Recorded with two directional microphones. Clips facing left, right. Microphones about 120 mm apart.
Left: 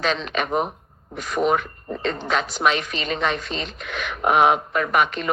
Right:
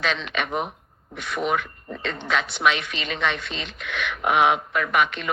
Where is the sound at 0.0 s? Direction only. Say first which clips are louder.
Left 3 dB; 40° left (ahead or behind).